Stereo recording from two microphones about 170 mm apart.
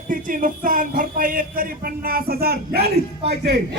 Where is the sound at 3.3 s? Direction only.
80° right.